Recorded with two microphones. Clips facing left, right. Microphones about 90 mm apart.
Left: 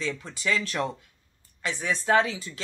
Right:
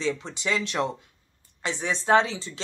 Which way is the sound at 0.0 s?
25° right (ahead or behind).